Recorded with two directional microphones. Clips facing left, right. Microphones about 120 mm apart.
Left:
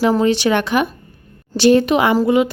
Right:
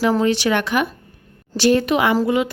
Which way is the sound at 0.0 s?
25° left (ahead or behind).